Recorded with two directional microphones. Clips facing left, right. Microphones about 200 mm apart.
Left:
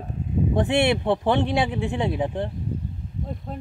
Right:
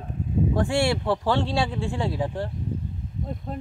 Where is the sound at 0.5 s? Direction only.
20° left (ahead or behind).